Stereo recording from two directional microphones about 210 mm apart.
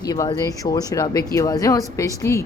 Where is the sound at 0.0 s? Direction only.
20° left (ahead or behind).